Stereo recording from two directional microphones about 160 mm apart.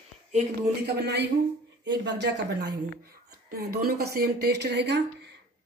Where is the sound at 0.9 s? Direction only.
90° right.